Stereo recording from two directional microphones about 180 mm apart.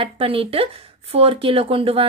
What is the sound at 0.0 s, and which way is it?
A woman's voice, 30° right (ahead or behind).